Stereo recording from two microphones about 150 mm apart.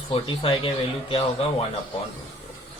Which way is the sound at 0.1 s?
35° left (ahead or behind).